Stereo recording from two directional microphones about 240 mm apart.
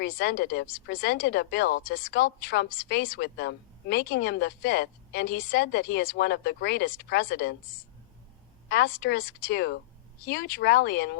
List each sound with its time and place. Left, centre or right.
0.0 s speech: left
8.7 s speech: left